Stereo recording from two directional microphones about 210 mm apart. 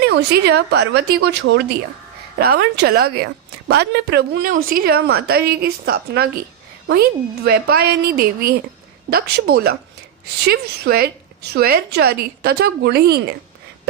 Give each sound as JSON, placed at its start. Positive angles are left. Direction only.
{"t": 0.1, "sound": "a woman's voice", "side_deg": -55}